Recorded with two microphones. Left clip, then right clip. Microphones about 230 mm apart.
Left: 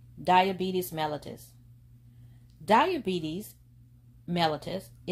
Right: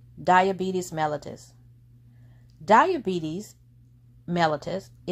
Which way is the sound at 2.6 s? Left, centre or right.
Right.